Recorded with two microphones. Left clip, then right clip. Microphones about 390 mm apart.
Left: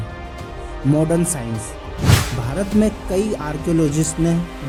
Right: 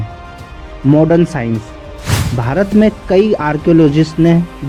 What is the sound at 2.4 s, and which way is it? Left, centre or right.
A man's voice, left.